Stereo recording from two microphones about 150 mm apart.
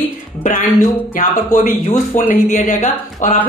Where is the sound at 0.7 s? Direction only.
60° left (ahead or behind).